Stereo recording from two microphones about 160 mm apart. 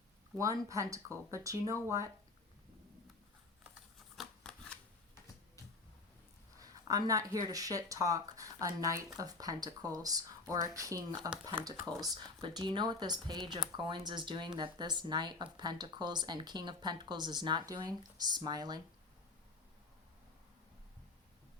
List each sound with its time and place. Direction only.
0.3 s speech: 20° right (ahead or behind)
4.2 s shuffling cards: 5° left (ahead or behind)
6.6 s speech: 20° right (ahead or behind)